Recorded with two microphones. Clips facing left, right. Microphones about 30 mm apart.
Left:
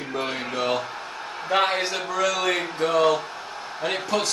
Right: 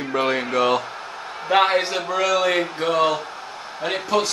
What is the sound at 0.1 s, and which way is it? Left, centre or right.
Speech, right.